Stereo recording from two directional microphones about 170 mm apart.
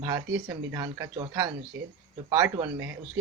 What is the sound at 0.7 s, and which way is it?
Speech, 20° right (ahead or behind).